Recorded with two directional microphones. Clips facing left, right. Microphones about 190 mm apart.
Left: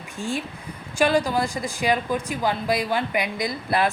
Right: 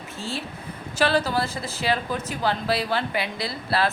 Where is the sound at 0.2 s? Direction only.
15° left (ahead or behind).